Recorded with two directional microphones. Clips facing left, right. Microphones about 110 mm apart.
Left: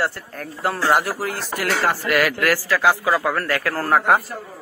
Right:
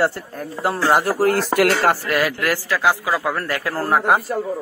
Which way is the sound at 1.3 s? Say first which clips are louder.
Right 10 dB; 75° right (ahead or behind).